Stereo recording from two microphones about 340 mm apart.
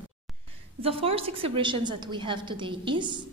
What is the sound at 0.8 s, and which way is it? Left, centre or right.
A woman's voice, centre.